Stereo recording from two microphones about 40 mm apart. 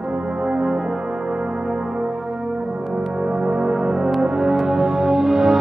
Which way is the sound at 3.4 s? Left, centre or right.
Right.